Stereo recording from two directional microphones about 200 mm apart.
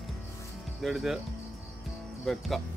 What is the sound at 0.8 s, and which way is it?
Speech, centre (ahead or behind).